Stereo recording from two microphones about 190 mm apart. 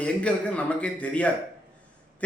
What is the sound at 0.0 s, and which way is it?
A man's voice, 5° left (ahead or behind).